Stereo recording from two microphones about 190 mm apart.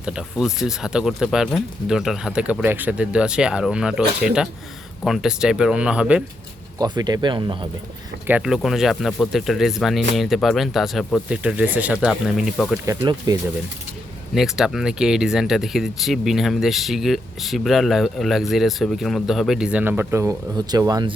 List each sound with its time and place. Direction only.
0.0 s speech: 5° right (ahead or behind)
6.7 s speech: 20° right (ahead or behind)
8.3 s speech: 5° right (ahead or behind)
12.8 s speech: 20° right (ahead or behind)
14.3 s speech: centre (ahead or behind); by 21.1 s 20° right (ahead or behind)